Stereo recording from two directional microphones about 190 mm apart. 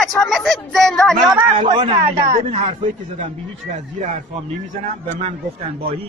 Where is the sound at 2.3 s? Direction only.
30° right (ahead or behind).